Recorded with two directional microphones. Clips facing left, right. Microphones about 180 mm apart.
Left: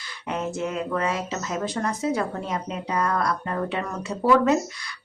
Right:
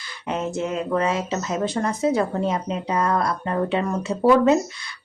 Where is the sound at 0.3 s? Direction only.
25° right (ahead or behind).